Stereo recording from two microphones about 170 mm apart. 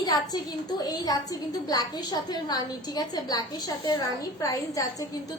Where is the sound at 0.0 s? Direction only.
25° left (ahead or behind).